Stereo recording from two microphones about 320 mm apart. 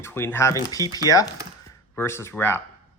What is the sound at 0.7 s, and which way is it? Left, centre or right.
Speech, centre.